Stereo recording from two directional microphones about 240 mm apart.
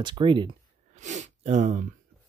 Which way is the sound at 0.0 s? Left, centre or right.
Centre.